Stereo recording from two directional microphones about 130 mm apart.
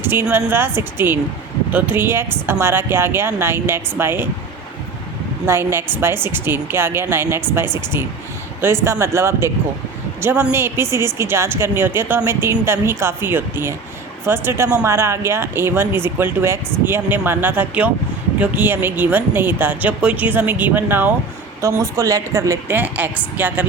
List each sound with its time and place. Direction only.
0.0 s speech: 15° right (ahead or behind)
5.5 s a woman's voice: 20° right (ahead or behind)
22.8 s speech: 15° right (ahead or behind)